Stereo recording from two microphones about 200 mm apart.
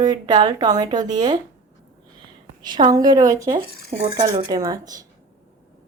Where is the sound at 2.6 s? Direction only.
20° right (ahead or behind).